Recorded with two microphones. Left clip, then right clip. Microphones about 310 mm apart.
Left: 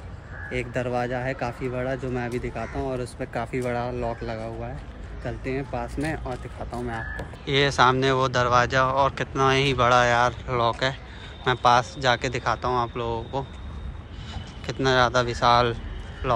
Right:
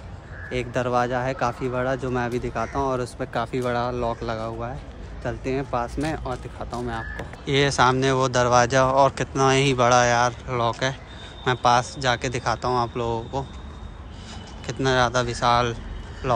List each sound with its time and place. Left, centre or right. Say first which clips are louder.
0.5 s speech: right 3 dB; centre
5.9 s speech: right 2 dB; centre
7.4 s speech: even; centre
14.7 s speech: even; centre